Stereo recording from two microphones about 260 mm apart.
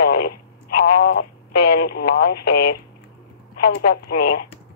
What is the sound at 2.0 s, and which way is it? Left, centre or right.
Speech, left.